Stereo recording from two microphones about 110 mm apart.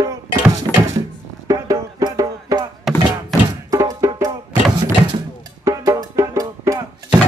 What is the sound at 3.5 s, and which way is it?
Music, 35° right (ahead or behind).